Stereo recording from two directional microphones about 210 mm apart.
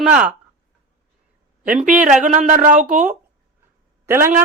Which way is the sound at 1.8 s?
40° right (ahead or behind).